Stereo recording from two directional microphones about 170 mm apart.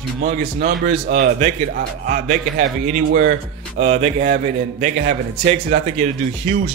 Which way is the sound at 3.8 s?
40° right (ahead or behind).